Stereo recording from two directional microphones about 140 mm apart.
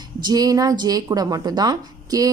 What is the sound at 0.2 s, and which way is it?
A woman's voice, 30° right (ahead or behind).